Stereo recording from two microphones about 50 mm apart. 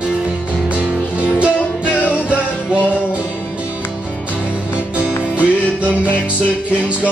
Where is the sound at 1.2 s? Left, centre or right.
Right.